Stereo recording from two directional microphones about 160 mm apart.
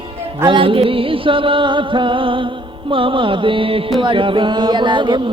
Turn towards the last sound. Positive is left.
turn(degrees=-30)  # may be behind; listen again after turning